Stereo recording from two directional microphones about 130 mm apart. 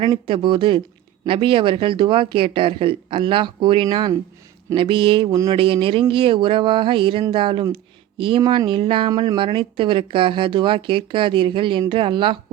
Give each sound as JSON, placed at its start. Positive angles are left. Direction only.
{"t": 0.0, "sound": "speech", "side_deg": -45}